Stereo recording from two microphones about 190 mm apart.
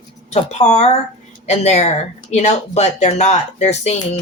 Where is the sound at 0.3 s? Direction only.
35° left (ahead or behind).